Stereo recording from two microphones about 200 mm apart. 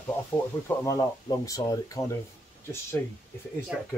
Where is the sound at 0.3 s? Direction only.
10° left (ahead or behind).